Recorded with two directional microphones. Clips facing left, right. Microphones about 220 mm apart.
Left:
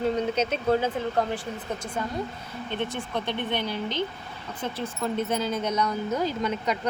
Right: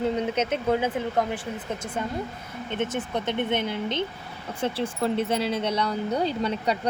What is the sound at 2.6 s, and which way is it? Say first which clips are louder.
Speech: right 3 dB; 20° right (ahead or behind).